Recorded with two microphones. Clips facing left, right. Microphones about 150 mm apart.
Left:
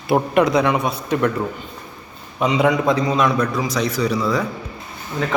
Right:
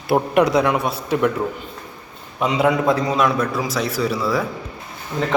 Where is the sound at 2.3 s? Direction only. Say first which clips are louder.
Left 1 dB; 5° right (ahead or behind).